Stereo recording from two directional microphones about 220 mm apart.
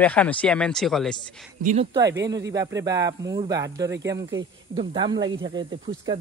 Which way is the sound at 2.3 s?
15° right (ahead or behind).